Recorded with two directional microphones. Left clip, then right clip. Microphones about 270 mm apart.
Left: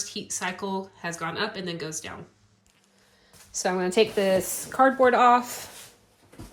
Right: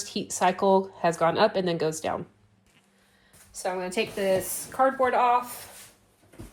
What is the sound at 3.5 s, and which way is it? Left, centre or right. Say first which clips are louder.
A woman's voice: left 5 dB; left.